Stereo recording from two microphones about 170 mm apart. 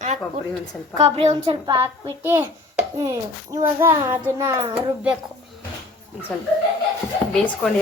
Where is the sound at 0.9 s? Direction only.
40° right (ahead or behind); by 4.7 s 15° right (ahead or behind).